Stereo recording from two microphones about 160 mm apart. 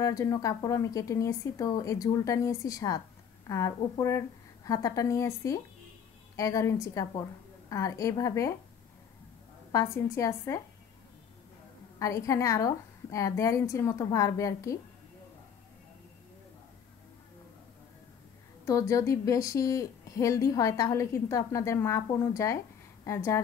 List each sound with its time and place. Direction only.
0.0 s a woman's voice: 20° left (ahead or behind)
9.7 s a woman's voice: 20° left (ahead or behind)
12.0 s a woman's voice: 20° left (ahead or behind)
18.7 s a woman's voice: 20° left (ahead or behind)